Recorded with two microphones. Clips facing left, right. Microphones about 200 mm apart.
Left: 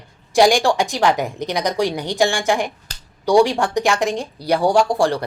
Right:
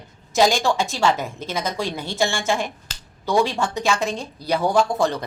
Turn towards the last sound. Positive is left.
turn(degrees=15)  # may be behind; listen again after turning